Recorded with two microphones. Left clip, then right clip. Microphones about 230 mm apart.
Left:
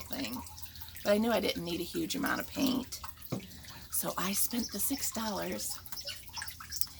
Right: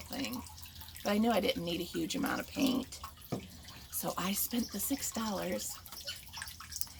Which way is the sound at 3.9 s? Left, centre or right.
Centre.